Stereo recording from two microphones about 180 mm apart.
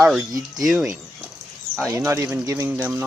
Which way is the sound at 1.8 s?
15° right (ahead or behind).